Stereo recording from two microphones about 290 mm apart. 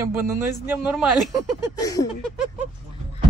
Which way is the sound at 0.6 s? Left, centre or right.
Centre.